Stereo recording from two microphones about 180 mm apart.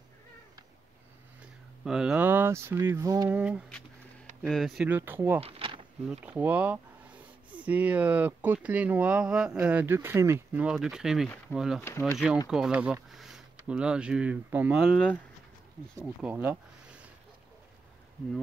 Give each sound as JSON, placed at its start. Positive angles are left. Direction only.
{"t": 1.9, "sound": "speech", "side_deg": -5}
{"t": 3.3, "sound": "speech", "side_deg": -5}
{"t": 5.4, "sound": "a sound", "side_deg": -30}
{"t": 6.0, "sound": "speech", "side_deg": -10}
{"t": 16.2, "sound": "speech", "side_deg": -10}